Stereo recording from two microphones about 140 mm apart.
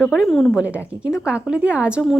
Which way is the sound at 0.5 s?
10° right (ahead or behind).